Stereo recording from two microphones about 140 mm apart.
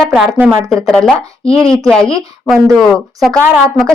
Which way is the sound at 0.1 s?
5° right (ahead or behind).